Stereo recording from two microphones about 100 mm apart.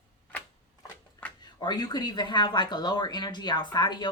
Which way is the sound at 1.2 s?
15° left (ahead or behind).